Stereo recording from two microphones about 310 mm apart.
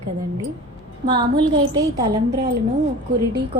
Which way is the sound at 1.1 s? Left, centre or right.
Centre.